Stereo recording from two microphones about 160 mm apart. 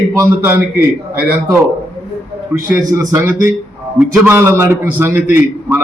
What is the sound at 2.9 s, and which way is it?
A man's voice, 20° right (ahead or behind).